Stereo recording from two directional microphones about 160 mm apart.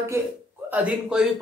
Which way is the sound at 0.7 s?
5° right (ahead or behind).